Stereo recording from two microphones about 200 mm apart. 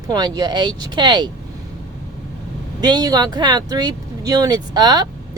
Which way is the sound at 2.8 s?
20° right (ahead or behind).